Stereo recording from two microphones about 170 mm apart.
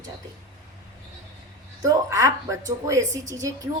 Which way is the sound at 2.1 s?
20° right (ahead or behind).